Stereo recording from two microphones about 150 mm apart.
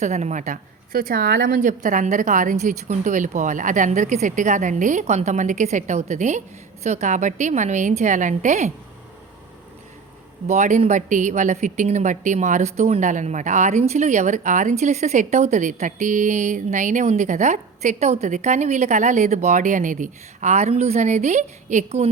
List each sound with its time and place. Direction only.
0.0 s a woman's voice: 50° right (ahead or behind)
10.4 s speech: 50° right (ahead or behind)